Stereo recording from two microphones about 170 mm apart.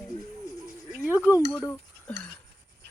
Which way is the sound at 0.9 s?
10° right (ahead or behind).